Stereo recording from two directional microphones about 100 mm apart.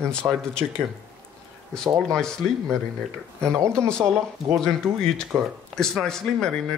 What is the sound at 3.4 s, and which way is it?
Speech, 30° right (ahead or behind).